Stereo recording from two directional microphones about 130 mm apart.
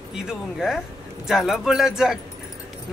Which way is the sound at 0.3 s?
5° right (ahead or behind).